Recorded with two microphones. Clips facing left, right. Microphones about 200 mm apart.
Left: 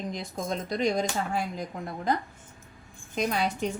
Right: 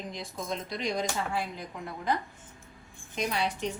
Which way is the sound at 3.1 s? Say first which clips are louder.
Left 3 dB; 45° left (ahead or behind).